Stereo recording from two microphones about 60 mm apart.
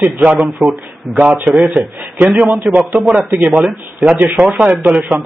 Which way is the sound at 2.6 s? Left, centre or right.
Right.